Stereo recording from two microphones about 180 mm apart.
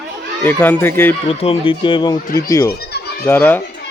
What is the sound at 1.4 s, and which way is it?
Speech, 30° left (ahead or behind).